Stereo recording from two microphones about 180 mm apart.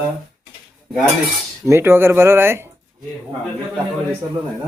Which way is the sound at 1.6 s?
15° right (ahead or behind).